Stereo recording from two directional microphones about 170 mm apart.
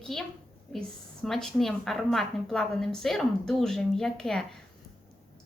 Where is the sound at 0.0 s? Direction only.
Centre (ahead or behind).